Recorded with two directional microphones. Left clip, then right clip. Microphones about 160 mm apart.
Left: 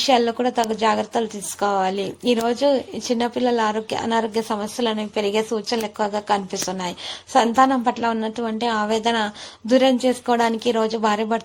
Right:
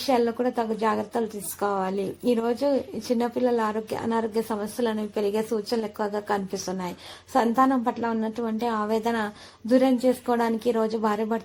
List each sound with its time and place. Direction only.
0.1 s a woman's voice: 25° left (ahead or behind)